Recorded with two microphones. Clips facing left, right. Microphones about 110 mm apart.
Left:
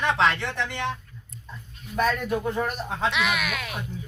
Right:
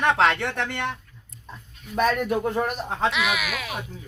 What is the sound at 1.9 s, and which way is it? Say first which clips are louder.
Speech: right 2 dB; 65° right (ahead or behind).